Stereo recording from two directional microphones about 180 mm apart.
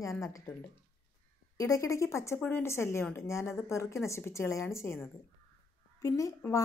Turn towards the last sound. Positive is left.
turn(degrees=20)  # may be behind; listen again after turning